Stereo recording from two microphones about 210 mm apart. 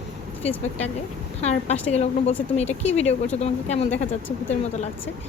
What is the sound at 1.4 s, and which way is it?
Speech, 30° left (ahead or behind).